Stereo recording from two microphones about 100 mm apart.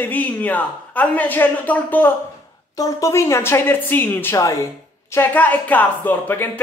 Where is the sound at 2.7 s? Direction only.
35° left (ahead or behind).